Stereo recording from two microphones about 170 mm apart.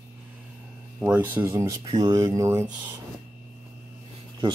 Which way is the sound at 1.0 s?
10° right (ahead or behind).